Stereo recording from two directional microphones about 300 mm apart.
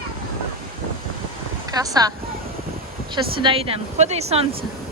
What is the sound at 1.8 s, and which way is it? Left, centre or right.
Speech, centre.